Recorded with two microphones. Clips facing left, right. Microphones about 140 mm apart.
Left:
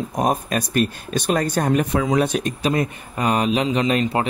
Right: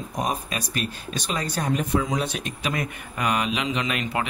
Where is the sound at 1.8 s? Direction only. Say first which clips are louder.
Left 5 dB; 75° left (ahead or behind).